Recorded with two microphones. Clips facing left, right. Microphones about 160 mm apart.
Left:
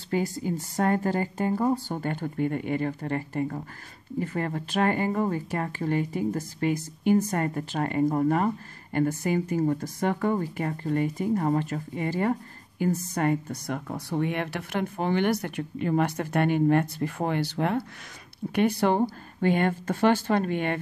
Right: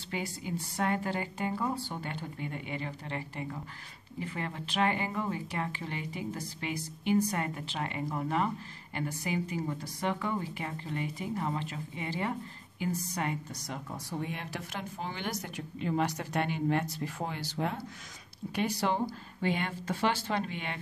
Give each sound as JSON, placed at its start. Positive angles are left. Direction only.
{"t": 0.1, "sound": "speech", "side_deg": 45}